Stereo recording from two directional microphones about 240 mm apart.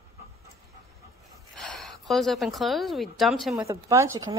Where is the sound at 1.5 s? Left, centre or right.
Centre.